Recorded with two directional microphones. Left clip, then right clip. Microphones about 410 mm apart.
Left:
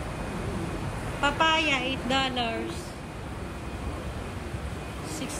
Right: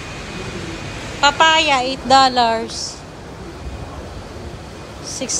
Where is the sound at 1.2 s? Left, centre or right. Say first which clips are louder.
Right 11 dB; centre.